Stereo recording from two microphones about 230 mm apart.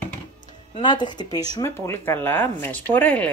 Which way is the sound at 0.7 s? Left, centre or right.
Centre.